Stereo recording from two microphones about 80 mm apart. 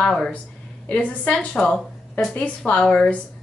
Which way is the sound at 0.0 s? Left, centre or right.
Centre.